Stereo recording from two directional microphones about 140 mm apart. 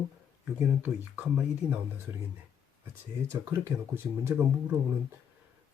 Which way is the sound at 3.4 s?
15° right (ahead or behind).